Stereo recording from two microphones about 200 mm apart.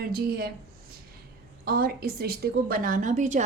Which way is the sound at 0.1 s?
50° right (ahead or behind).